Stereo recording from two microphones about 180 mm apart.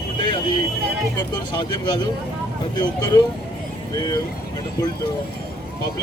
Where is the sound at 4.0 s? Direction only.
20° left (ahead or behind).